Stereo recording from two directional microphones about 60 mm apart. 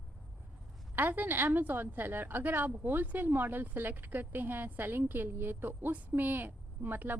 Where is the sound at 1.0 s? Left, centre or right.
Right.